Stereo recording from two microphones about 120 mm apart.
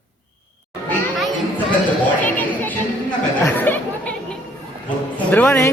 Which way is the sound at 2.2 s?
15° left (ahead or behind).